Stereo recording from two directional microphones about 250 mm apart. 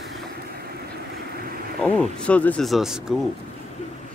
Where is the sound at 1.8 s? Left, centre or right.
Centre.